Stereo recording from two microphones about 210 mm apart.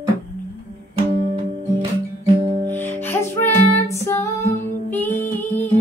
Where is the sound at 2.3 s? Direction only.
25° right (ahead or behind).